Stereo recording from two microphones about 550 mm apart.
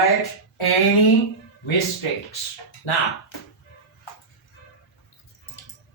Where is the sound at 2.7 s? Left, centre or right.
Left.